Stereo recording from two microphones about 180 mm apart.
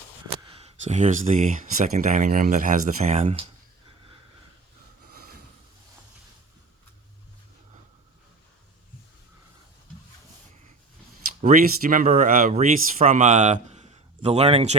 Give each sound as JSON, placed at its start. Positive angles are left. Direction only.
{"t": 0.5, "sound": "speech", "side_deg": -40}
{"t": 11.4, "sound": "speech", "side_deg": -50}